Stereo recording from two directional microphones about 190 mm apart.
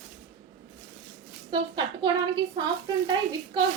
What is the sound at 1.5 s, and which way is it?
A woman's voice, 25° right (ahead or behind).